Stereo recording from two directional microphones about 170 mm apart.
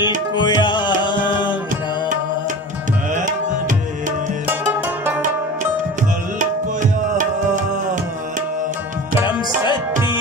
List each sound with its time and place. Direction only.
0.0 s tabla: 25° left (ahead or behind)
3.2 s tabla: 50° right (ahead or behind)
4.5 s music: 10° right (ahead or behind)
6.8 s music: 50° right (ahead or behind)
9.2 s music: 30° left (ahead or behind)